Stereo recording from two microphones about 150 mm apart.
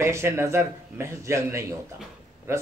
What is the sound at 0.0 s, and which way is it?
A man's voice, 15° right (ahead or behind).